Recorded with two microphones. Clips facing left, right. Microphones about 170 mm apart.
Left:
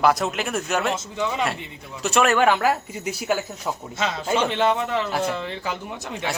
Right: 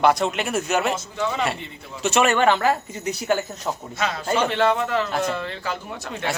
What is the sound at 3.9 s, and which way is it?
A man's voice, 20° left (ahead or behind).